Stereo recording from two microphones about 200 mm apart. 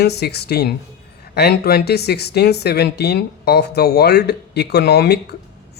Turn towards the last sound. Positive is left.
turn(degrees=55)  # may be behind; listen again after turning